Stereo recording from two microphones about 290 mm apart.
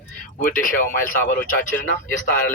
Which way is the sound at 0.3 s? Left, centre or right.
Left.